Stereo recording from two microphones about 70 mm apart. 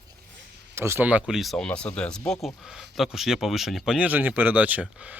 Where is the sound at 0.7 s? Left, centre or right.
Right.